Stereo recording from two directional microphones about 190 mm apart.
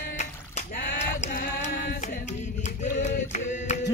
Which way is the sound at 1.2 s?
45° left (ahead or behind).